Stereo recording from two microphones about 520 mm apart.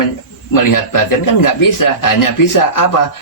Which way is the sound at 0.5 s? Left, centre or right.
Left.